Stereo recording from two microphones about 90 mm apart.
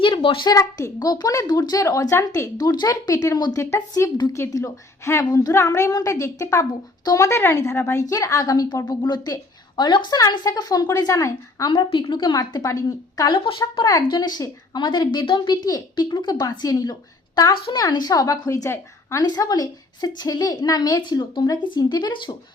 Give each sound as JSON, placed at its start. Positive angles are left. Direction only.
{"t": 0.0, "sound": "a child's voice", "side_deg": 70}
{"t": 0.4, "sound": "a child's voice", "side_deg": 40}
{"t": 2.6, "sound": "a woman's voice", "side_deg": 45}
{"t": 4.0, "sound": "a child's voice", "side_deg": 30}
{"t": 5.3, "sound": "a woman's voice", "side_deg": 45}
{"t": 5.5, "sound": "a child's voice", "side_deg": 30}
{"t": 7.0, "sound": "speech", "side_deg": 45}
{"t": 7.3, "sound": "a child's voice", "side_deg": 30}
{"t": 11.7, "sound": "a woman's voice", "side_deg": 70}
{"t": 13.3, "sound": "speech", "side_deg": 65}
{"t": 14.2, "sound": "a woman's voice", "side_deg": 45}
{"t": 15.6, "sound": "a woman's voice", "side_deg": 50}
{"t": 17.5, "sound": "speech", "side_deg": 60}
{"t": 17.8, "sound": "a woman's voice", "side_deg": 45}